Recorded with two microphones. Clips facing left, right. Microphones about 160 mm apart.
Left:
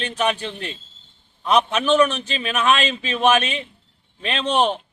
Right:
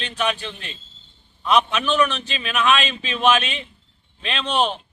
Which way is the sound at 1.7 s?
45° left (ahead or behind).